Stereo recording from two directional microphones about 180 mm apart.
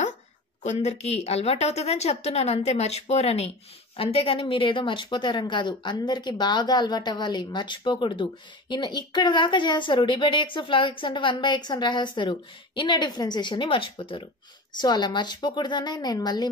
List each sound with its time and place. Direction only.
0.7 s a woman's voice: 35° left (ahead or behind)